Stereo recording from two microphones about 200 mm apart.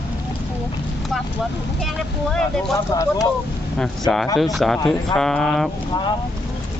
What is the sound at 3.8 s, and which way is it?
Speech, centre (ahead or behind).